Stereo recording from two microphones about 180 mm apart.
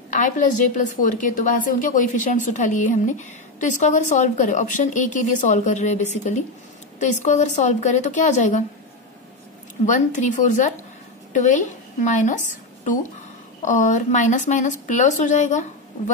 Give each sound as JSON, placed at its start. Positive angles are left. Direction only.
{"t": 0.1, "sound": "a woman's voice", "side_deg": 45}
{"t": 9.8, "sound": "a woman's voice", "side_deg": 45}